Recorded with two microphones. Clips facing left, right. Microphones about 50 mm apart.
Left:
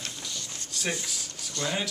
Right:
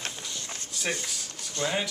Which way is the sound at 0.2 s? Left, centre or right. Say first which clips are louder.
Even; right.